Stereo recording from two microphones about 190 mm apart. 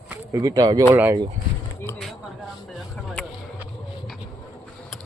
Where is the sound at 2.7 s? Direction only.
Centre (ahead or behind).